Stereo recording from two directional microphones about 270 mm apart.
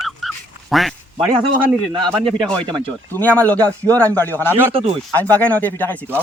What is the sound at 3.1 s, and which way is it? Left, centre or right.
Speech, centre.